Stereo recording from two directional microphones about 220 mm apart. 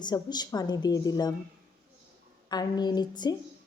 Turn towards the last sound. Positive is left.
turn(degrees=20)  # may be behind; listen again after turning